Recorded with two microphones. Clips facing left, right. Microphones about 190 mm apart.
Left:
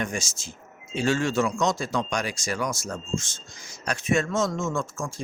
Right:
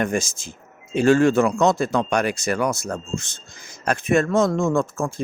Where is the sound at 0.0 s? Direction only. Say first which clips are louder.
Right 7 dB; 55° right (ahead or behind).